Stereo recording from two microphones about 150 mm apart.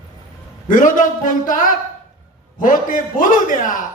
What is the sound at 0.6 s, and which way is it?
A man's voice, 60° left (ahead or behind).